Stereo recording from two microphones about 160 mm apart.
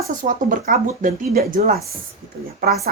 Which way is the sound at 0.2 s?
55° right (ahead or behind).